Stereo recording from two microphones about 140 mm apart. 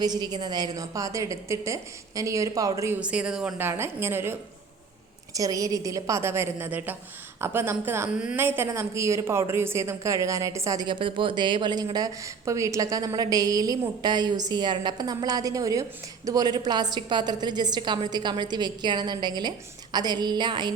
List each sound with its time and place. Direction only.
0.0 s speech: 30° right (ahead or behind)
3.0 s a woman's voice: 10° right (ahead or behind); by 20.7 s 30° right (ahead or behind)